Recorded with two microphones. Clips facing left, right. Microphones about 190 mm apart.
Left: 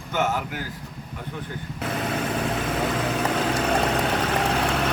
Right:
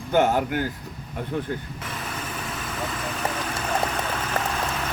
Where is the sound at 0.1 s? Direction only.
50° right (ahead or behind).